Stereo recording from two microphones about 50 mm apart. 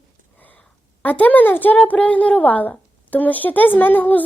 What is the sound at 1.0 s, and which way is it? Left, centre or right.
A woman's voice, left.